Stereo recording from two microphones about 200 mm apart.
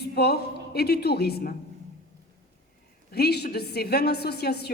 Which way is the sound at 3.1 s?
50° left (ahead or behind).